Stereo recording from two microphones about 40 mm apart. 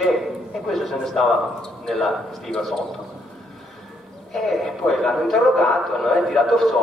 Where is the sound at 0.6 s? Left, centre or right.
Centre.